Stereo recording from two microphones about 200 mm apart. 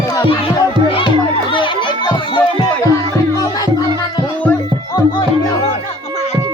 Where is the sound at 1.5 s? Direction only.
25° left (ahead or behind).